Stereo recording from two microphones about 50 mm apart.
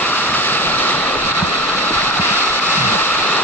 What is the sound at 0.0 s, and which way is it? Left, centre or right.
Vehicle, left.